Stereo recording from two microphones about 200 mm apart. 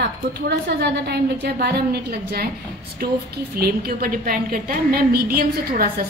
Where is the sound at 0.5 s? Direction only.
55° right (ahead or behind).